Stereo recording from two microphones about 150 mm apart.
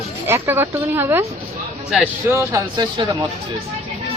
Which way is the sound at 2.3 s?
20° right (ahead or behind).